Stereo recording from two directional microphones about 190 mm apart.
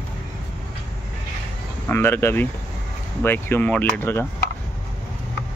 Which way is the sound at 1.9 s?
10° left (ahead or behind).